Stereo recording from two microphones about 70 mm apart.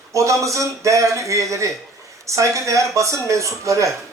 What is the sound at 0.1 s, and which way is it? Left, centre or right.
Speech, right.